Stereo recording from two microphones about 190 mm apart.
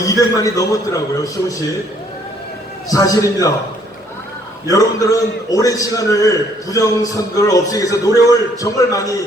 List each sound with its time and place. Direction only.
0.0 s a man's voice: 15° left (ahead or behind)
2.9 s a man's voice: 15° left (ahead or behind)
4.7 s a man's voice: 20° left (ahead or behind)